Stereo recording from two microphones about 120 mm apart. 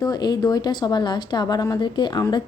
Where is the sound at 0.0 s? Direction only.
35° left (ahead or behind).